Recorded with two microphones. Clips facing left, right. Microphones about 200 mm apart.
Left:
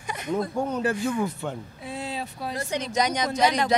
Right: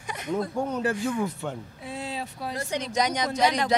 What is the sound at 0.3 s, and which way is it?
Speech, 25° left (ahead or behind).